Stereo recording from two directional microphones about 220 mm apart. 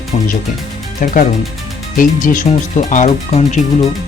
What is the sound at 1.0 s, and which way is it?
Speech, 35° left (ahead or behind).